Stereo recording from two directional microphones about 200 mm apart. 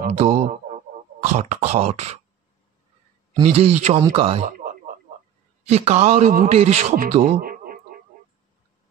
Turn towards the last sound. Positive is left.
turn(degrees=-35)  # may be behind; listen again after turning